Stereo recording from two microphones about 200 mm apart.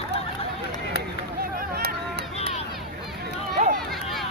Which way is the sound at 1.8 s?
50° right (ahead or behind).